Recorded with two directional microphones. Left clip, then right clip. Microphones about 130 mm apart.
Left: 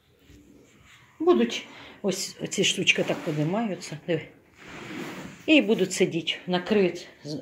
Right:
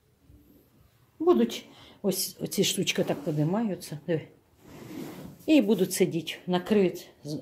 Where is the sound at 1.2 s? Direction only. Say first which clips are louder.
Left 2 dB; 15° right (ahead or behind).